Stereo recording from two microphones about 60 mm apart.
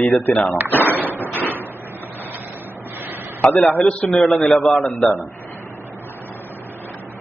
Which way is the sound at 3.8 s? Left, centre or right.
Centre.